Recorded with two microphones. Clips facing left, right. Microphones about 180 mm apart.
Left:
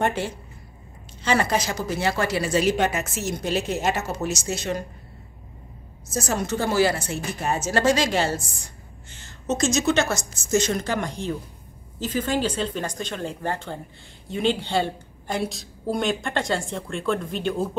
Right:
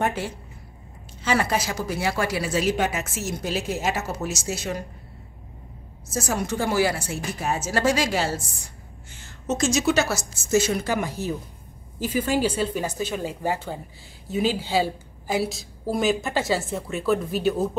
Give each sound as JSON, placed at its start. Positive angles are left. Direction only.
{"t": 0.0, "sound": "speech", "side_deg": -5}
{"t": 6.0, "sound": "a woman's voice", "side_deg": -10}